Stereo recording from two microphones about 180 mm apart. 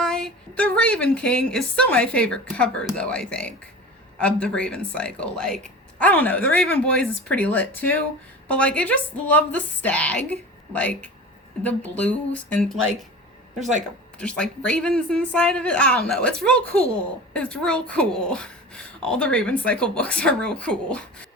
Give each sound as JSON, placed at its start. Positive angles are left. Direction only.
{"t": 0.0, "sound": "a woman's voice", "side_deg": 5}
{"t": 14.2, "sound": "a woman's voice", "side_deg": 5}